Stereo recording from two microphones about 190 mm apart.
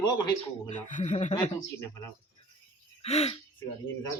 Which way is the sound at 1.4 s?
20° left (ahead or behind).